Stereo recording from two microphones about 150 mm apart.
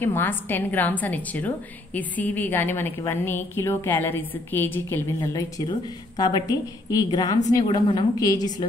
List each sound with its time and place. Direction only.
0.0 s a woman's voice: 15° left (ahead or behind)